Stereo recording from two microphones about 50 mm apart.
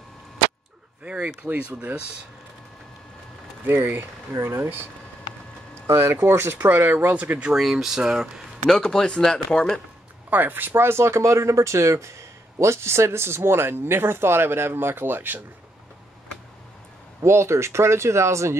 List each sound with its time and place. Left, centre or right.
1.0 s speech: right
3.6 s speech: right
4.3 s speech: right
5.9 s speech: right
6.7 s speech: right
7.5 s speech: centre
8.6 s speech: centre
10.3 s speech: right
10.9 s speech: right
17.2 s speech: right